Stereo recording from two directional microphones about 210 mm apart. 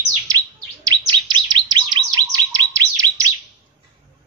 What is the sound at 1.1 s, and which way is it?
Bird, 20° right (ahead or behind).